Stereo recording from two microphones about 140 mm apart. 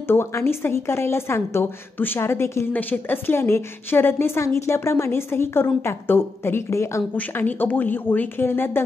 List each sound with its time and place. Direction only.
0.0 s a woman's voice: 15° left (ahead or behind)